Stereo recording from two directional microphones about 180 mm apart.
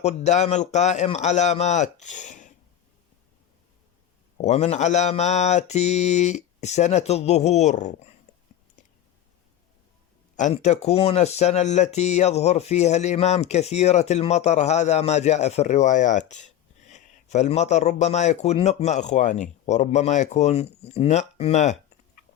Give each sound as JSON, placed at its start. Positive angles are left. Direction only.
{"t": 0.0, "sound": "speech", "side_deg": 40}
{"t": 4.4, "sound": "speech", "side_deg": 40}
{"t": 10.3, "sound": "speech", "side_deg": 40}